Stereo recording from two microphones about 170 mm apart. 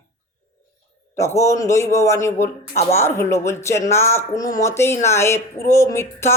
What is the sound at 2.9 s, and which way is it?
Speech, 15° left (ahead or behind).